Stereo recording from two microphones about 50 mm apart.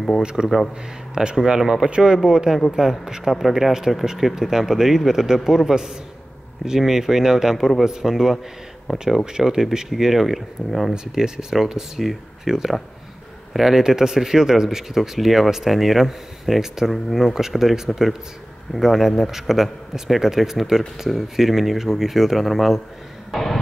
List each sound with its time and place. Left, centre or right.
0.2 s speech: centre
11.1 s a man's voice: centre